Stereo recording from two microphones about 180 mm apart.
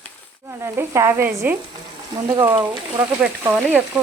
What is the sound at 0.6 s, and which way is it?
Speech, 15° right (ahead or behind).